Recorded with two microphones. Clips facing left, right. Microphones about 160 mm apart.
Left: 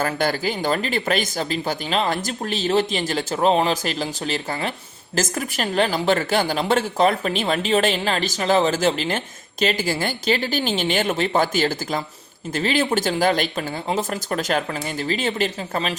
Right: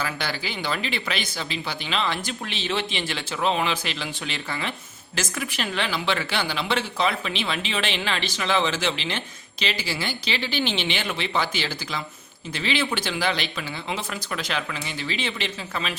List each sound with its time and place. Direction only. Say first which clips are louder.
0.0 s speech: left 8 dB; 45° left (ahead or behind)